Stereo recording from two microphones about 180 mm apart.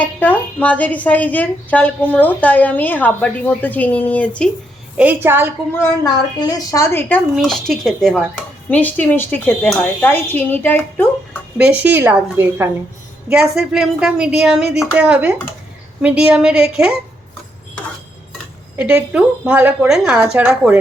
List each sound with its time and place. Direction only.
0.0 s a woman's voice: 10° left (ahead or behind)
4.9 s a woman's voice: 10° right (ahead or behind)
5.8 s a woman's voice: 15° left (ahead or behind)
7.3 s a woman's voice: centre (ahead or behind)
11.5 s a woman's voice: 5° right (ahead or behind)
13.3 s a woman's voice: centre (ahead or behind)
18.8 s a woman's voice: 5° right (ahead or behind)